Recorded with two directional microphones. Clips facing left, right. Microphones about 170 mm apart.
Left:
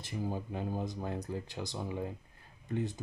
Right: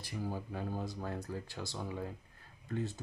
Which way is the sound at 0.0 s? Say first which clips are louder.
Left 3 dB; 20° left (ahead or behind).